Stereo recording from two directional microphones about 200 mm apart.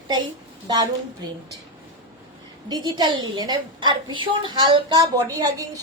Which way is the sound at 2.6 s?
20° right (ahead or behind).